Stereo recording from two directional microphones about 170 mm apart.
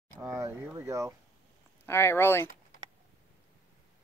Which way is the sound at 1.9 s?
15° left (ahead or behind).